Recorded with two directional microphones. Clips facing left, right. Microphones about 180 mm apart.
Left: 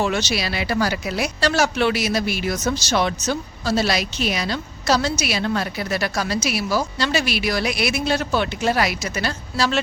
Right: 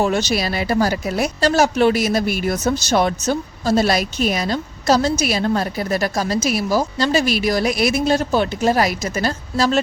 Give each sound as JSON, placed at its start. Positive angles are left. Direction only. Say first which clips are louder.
{"t": 0.0, "sound": "a woman's voice", "louder": "right 4 dB", "side_deg": -45}